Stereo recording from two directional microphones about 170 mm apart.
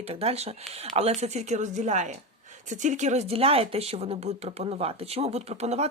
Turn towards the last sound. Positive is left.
turn(degrees=-40)  # may be behind; listen again after turning